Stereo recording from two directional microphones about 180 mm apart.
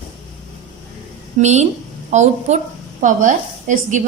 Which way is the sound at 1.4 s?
40° right (ahead or behind).